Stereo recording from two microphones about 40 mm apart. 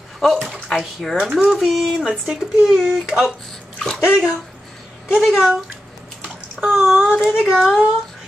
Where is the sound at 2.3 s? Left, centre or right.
Right.